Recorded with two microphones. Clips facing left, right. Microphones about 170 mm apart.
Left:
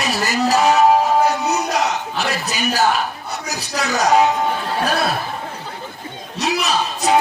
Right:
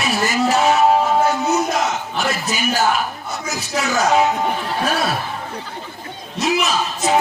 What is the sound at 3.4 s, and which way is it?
Speech, 35° left (ahead or behind).